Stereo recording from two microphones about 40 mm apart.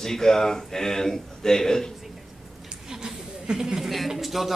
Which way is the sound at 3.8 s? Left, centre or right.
Centre.